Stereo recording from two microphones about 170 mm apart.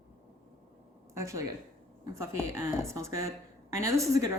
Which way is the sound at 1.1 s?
15° right (ahead or behind).